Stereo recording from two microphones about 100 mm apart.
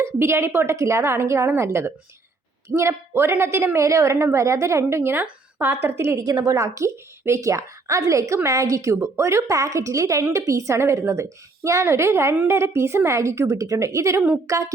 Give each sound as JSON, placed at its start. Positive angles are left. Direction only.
{"t": 0.0, "sound": "a woman's voice", "side_deg": -25}